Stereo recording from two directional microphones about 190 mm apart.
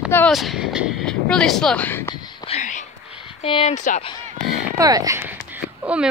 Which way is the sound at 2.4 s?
35° left (ahead or behind).